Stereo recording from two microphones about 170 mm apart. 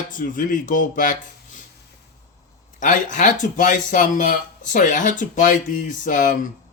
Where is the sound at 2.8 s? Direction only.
45° left (ahead or behind).